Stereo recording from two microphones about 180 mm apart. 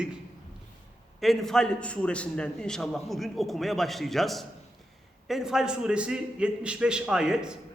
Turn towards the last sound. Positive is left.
turn(degrees=-5)  # may be behind; listen again after turning